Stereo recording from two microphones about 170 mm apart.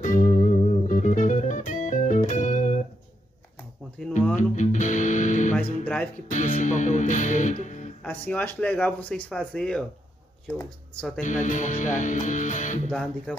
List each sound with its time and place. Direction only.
0.0 s music: 45° left (ahead or behind)
4.0 s music: 5° left (ahead or behind)
4.4 s music: 45° left (ahead or behind)
5.5 s music: 10° left (ahead or behind)
6.3 s music: 45° left (ahead or behind)
8.0 s speech: 10° left (ahead or behind)
11.2 s speech: 45° left (ahead or behind)